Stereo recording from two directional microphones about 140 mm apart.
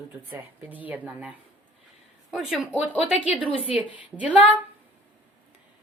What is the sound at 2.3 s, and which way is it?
Speech, 5° right (ahead or behind).